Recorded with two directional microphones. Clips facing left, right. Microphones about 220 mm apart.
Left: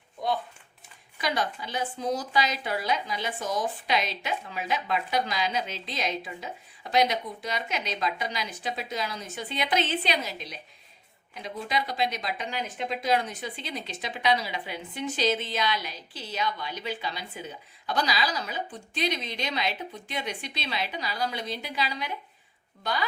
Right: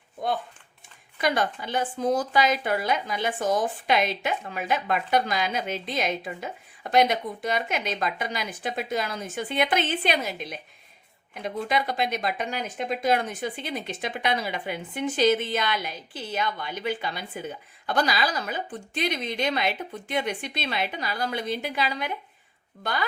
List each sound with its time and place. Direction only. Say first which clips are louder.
1.2 s speech: right 4 dB; 55° right (ahead or behind)